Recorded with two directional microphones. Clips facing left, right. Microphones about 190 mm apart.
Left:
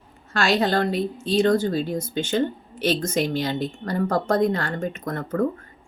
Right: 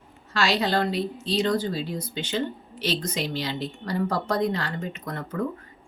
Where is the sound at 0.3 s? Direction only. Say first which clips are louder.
Left 3 dB; 50° left (ahead or behind).